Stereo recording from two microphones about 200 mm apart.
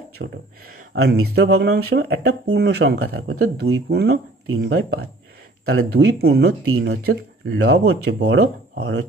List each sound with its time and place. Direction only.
0.2 s speech: 60° right (ahead or behind)